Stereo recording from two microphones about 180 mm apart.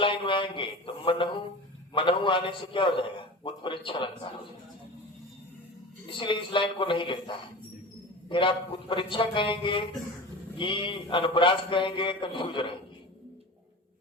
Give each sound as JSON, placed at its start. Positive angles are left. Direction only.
{"t": 0.0, "sound": "a man's voice", "side_deg": 30}
{"t": 6.1, "sound": "a man's voice", "side_deg": 30}